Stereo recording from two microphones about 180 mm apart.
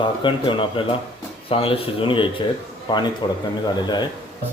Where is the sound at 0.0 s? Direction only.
25° left (ahead or behind).